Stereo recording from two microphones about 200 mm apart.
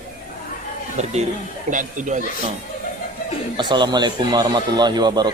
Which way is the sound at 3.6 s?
20° right (ahead or behind).